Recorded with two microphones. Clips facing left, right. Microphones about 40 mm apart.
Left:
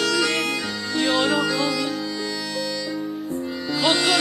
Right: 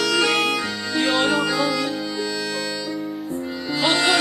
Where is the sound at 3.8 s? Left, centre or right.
Centre.